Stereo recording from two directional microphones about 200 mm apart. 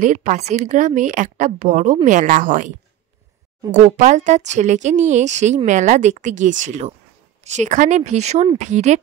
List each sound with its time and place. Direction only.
0.0 s a woman's voice: 35° right (ahead or behind)
3.7 s a woman's voice: 35° right (ahead or behind)